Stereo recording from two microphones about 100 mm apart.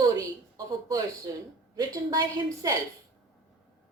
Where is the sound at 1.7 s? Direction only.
35° right (ahead or behind).